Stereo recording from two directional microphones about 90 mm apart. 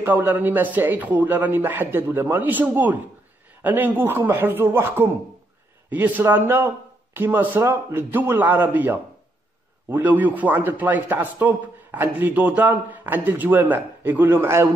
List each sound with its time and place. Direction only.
0.0 s speech: 25° right (ahead or behind)